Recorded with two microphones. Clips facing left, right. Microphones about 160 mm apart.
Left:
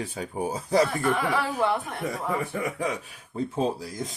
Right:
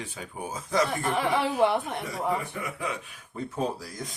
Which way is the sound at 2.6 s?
40° left (ahead or behind).